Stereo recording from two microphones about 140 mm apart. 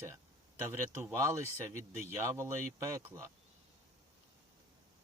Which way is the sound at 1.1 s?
20° right (ahead or behind).